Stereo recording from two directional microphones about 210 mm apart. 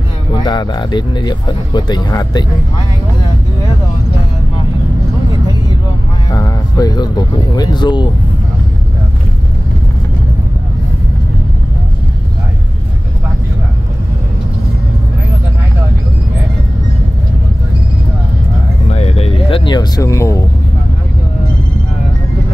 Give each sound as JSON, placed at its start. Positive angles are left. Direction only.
{"t": 0.3, "sound": "speech", "side_deg": 20}
{"t": 6.3, "sound": "speech", "side_deg": 15}
{"t": 18.9, "sound": "vehicle", "side_deg": 30}